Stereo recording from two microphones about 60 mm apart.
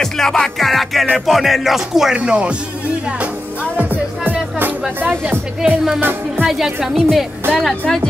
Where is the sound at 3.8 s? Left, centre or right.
Right.